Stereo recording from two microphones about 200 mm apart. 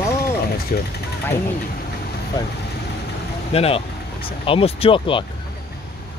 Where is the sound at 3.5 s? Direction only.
30° left (ahead or behind).